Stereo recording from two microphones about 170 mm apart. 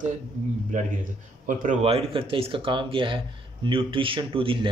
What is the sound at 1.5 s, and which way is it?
Speech, 50° right (ahead or behind).